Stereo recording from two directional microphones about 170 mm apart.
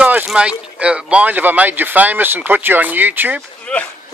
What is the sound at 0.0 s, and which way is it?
Speech, 10° right (ahead or behind).